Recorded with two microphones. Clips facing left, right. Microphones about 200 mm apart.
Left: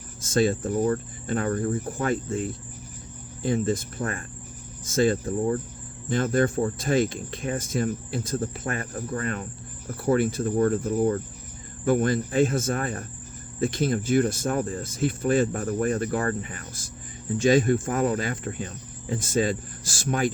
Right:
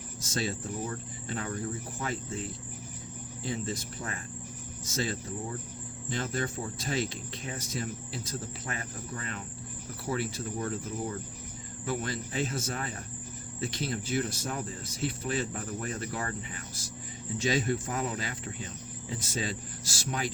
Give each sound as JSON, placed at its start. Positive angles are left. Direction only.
{"t": 0.2, "sound": "speech", "side_deg": 50}